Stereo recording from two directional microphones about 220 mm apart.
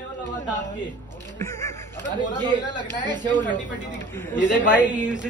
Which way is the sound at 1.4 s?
15° left (ahead or behind).